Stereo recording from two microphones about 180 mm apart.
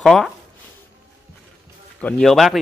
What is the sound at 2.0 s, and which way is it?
Speech, 5° left (ahead or behind).